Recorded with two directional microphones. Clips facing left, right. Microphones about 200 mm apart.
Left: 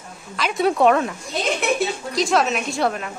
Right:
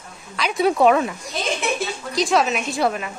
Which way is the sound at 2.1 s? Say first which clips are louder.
Right 1 dB; centre (ahead or behind).